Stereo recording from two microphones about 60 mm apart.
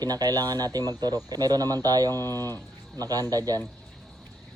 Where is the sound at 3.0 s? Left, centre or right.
Right.